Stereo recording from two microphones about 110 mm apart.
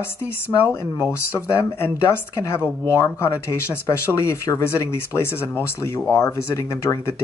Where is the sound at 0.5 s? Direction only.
35° left (ahead or behind).